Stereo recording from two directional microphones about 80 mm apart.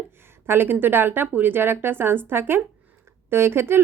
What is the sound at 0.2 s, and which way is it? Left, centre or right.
A woman's voice, right.